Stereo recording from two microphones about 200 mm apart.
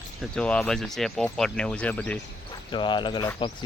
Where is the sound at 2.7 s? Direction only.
25° left (ahead or behind).